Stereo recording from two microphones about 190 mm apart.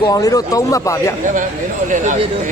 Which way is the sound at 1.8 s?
40° right (ahead or behind).